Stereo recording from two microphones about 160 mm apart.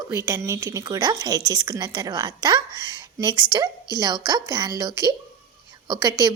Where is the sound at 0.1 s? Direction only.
15° right (ahead or behind).